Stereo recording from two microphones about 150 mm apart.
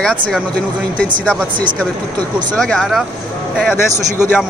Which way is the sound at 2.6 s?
Centre (ahead or behind).